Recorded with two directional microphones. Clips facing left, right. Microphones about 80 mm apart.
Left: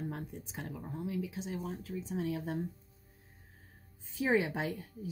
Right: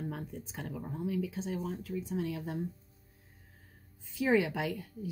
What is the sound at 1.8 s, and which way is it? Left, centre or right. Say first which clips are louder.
Speech: right 2 dB; left.